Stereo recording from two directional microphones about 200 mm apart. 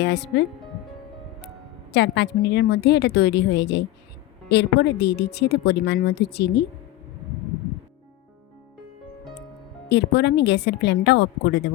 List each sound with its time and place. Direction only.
0.0 s speech: 60° left (ahead or behind)
1.9 s speech: 60° left (ahead or behind)
9.9 s speech: 55° left (ahead or behind)